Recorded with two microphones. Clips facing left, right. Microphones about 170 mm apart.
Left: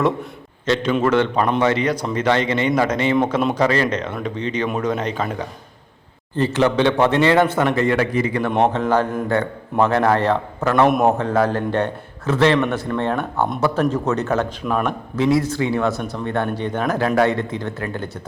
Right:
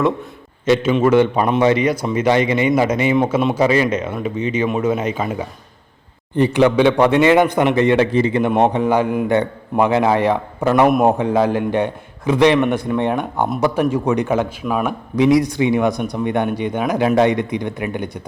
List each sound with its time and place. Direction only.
0.6 s a man's voice: 10° right (ahead or behind)